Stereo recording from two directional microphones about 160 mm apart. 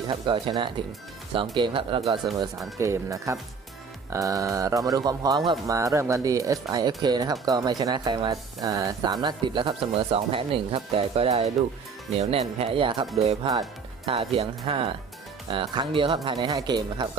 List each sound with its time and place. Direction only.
0.1 s speech: 30° right (ahead or behind)
13.1 s speech: 40° right (ahead or behind)